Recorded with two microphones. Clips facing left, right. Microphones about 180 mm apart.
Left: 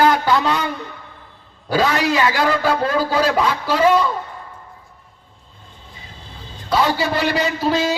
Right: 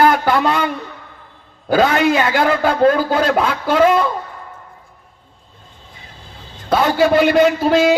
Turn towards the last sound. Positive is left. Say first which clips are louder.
# right 6 dB
turn(degrees=-55)  # may be behind; listen again after turning